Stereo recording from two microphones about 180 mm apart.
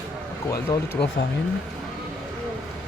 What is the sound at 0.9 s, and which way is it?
Speech, 65° left (ahead or behind).